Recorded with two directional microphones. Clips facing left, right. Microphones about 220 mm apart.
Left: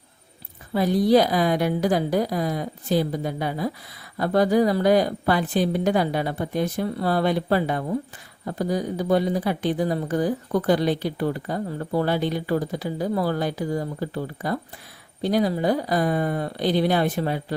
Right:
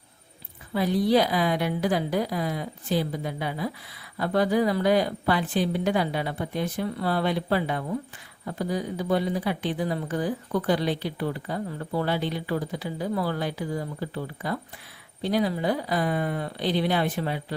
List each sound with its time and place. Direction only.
0.7 s a woman's voice: 40° left (ahead or behind)